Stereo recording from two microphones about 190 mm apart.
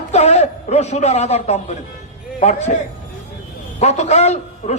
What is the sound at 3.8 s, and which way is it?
A man's voice, 35° left (ahead or behind).